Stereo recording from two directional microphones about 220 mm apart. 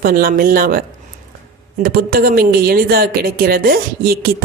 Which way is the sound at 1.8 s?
40° right (ahead or behind).